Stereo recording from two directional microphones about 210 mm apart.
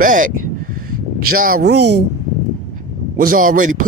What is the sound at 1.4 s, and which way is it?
Speech, 45° right (ahead or behind).